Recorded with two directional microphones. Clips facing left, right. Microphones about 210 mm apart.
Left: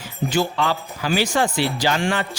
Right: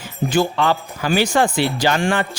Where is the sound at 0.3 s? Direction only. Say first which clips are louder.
Right 4 dB; 55° right (ahead or behind).